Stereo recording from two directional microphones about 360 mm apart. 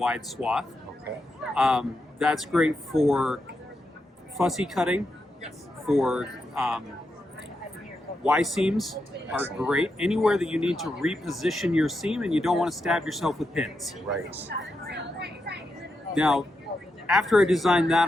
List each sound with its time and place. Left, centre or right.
0.0 s speech: centre
8.2 s speech: centre
14.8 s vehicle: right
16.1 s speech: centre